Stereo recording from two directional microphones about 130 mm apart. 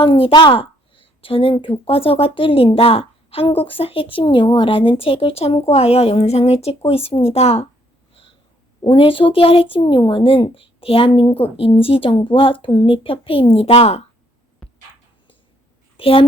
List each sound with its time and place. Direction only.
0.0 s a woman's voice: 45° left (ahead or behind)
8.8 s a woman's voice: 45° left (ahead or behind)
16.0 s a woman's voice: 45° left (ahead or behind)